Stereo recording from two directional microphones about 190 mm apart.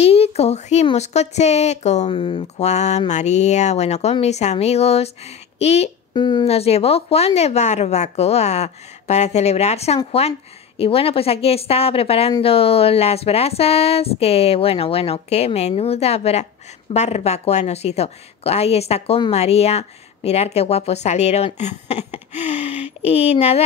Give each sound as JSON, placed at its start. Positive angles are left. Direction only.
{"t": 0.0, "sound": "speech", "side_deg": 30}